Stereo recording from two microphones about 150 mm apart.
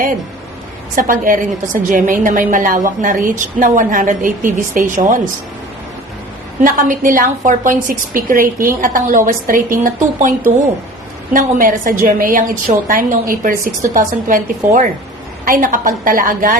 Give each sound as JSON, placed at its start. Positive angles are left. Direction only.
{"t": 0.9, "sound": "a woman's voice", "side_deg": -65}
{"t": 6.6, "sound": "a woman's voice", "side_deg": -65}